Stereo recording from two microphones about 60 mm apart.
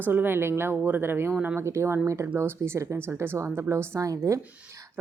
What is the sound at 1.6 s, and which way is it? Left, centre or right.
Speech, right.